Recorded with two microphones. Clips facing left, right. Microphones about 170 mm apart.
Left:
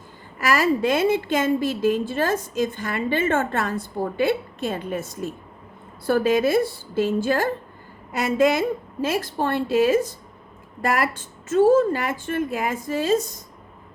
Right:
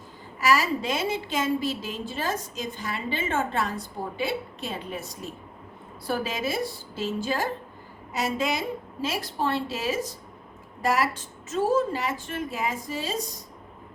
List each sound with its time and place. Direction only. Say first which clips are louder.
0.3 s a woman's voice: left 3 dB; 55° left (ahead or behind)